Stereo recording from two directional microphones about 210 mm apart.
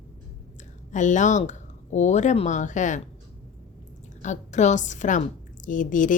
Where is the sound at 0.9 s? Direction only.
35° left (ahead or behind).